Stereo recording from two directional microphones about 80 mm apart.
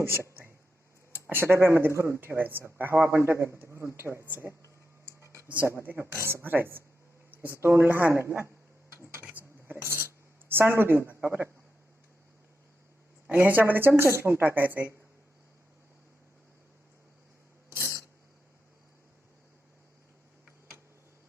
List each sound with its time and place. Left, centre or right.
0.0 s speech: right
5.8 s speech: right
9.3 s a sound: right
10.5 s speech: right
13.2 s speech: centre
17.7 s a sound: right